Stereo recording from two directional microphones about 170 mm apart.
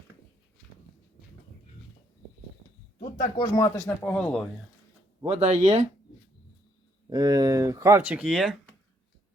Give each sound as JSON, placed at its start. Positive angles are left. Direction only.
{"t": 3.3, "sound": "speech", "side_deg": 20}
{"t": 5.3, "sound": "speech", "side_deg": -40}
{"t": 7.1, "sound": "speech", "side_deg": -20}